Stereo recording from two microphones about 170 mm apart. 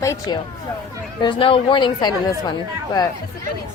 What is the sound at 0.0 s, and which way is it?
Speech, 20° left (ahead or behind).